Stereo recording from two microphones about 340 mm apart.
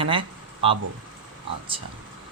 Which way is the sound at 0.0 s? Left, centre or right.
Centre.